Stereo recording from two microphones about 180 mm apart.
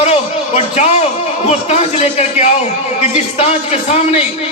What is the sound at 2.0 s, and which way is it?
A man's voice, 35° left (ahead or behind).